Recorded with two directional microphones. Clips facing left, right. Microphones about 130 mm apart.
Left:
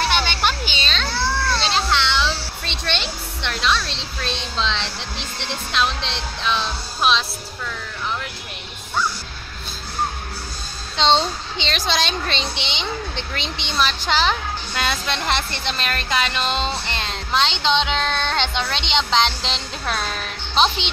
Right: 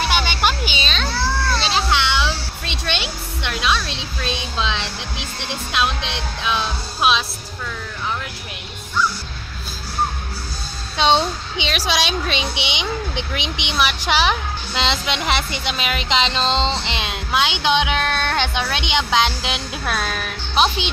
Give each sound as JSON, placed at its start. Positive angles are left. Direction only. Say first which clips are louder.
{"t": 0.0, "sound": "children playing", "louder": "right 1 dB", "side_deg": -10}
{"t": 5.7, "sound": "a woman's voice", "louder": "right 1 dB", "side_deg": -10}
{"t": 11.0, "sound": "a woman's voice", "louder": "right 1 dB", "side_deg": -10}